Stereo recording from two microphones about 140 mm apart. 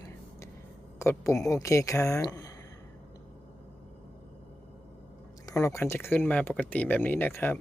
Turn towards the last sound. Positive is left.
turn(degrees=15)  # may be behind; listen again after turning